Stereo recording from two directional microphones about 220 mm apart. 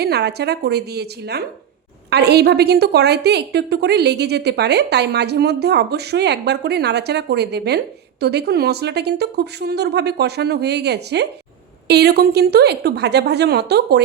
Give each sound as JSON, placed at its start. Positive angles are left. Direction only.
{"t": 0.0, "sound": "a woman's voice", "side_deg": -45}